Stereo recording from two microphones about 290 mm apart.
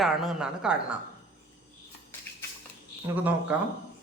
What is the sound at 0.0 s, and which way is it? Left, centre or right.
Speech, centre.